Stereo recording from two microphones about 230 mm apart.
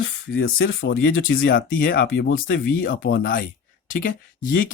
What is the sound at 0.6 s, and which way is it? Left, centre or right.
Speech, left.